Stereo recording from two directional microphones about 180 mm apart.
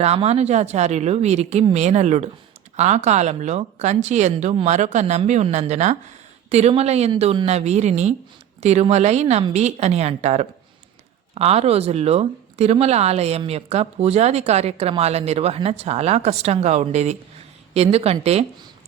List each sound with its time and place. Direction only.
0.0 s speech: 35° right (ahead or behind)